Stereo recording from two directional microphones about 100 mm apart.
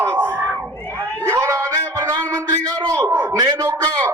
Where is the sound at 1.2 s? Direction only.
30° right (ahead or behind).